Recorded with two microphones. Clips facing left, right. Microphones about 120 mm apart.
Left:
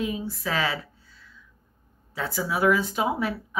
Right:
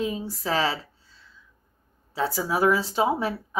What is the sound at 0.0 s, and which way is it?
Speech, 35° right (ahead or behind).